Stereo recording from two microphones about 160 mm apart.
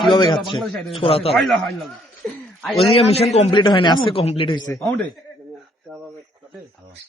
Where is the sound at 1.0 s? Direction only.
35° left (ahead or behind).